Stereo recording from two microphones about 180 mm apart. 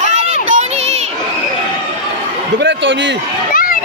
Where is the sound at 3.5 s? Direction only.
50° left (ahead or behind).